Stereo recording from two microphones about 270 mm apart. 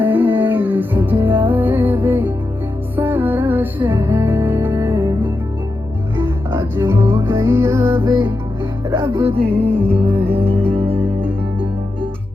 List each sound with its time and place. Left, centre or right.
0.0 s music: centre
10.8 s music: centre